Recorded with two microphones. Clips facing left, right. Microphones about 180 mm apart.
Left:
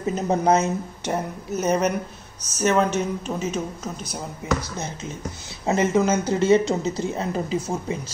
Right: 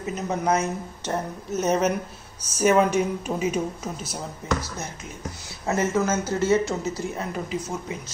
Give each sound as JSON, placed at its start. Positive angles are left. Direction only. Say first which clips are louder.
{"t": 0.0, "sound": "speech", "louder": "left 5 dB", "side_deg": 30}
{"t": 1.0, "sound": "speech", "louder": "left 1 dB", "side_deg": 10}
{"t": 5.7, "sound": "speech", "louder": "left 3 dB", "side_deg": 15}